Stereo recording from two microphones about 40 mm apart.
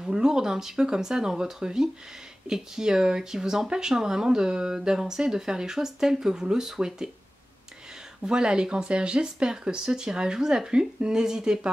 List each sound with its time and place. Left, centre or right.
0.0 s speech: centre
8.2 s speech: centre